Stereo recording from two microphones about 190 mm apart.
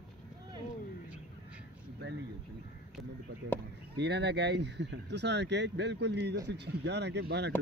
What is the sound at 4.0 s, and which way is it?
Speech, 65° right (ahead or behind).